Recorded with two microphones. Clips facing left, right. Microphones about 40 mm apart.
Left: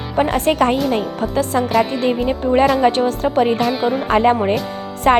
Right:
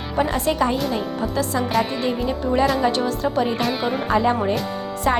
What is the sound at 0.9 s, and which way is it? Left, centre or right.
Speech, left.